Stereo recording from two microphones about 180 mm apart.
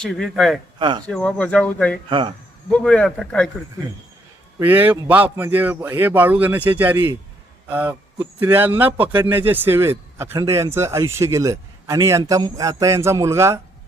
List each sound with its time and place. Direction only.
0.0 s speech: centre (ahead or behind)
0.8 s speech: 25° right (ahead or behind)
1.0 s speech: 5° left (ahead or behind)
2.0 s speech: 25° right (ahead or behind)
2.7 s speech: 5° left (ahead or behind)
4.6 s speech: 10° right (ahead or behind)